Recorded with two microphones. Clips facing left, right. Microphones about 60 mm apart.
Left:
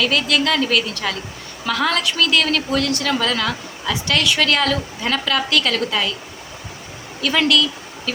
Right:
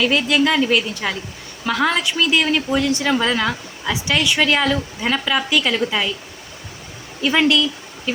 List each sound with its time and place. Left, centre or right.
0.0 s a woman's voice: centre
7.2 s speech: right